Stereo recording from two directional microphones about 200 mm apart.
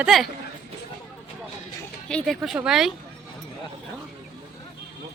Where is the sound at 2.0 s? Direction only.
5° left (ahead or behind).